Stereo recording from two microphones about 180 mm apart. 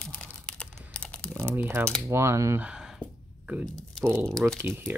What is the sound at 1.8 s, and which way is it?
Speech, 10° right (ahead or behind).